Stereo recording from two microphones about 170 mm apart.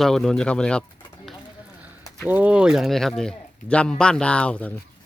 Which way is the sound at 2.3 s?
10° right (ahead or behind).